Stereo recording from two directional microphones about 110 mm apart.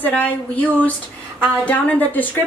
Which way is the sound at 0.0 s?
15° left (ahead or behind).